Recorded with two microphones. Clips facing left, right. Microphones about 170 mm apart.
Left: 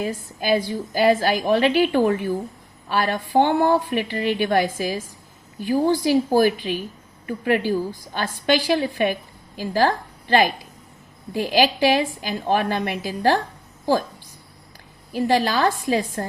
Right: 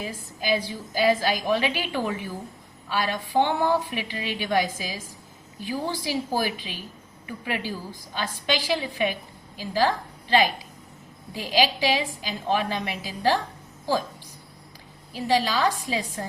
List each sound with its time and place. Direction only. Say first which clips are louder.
0.0 s a woman's voice: left 6 dB; 55° left (ahead or behind)
15.1 s a woman's voice: left 4 dB; 55° left (ahead or behind)